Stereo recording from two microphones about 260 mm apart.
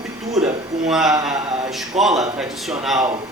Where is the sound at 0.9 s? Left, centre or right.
Centre.